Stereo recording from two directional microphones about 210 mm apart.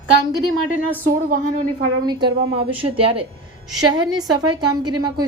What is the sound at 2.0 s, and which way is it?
A woman's voice, 20° right (ahead or behind).